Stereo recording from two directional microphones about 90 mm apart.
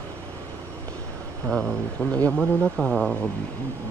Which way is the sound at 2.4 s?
5° left (ahead or behind).